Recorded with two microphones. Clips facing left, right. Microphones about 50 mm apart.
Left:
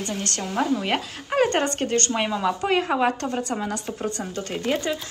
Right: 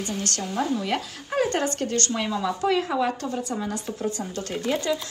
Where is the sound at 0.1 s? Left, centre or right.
Left.